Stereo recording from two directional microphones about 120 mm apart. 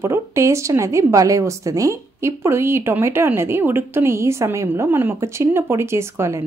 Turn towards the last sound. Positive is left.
turn(degrees=-20)  # may be behind; listen again after turning